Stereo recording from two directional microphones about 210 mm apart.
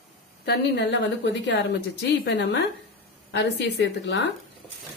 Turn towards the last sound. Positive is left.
turn(degrees=60)  # may be behind; listen again after turning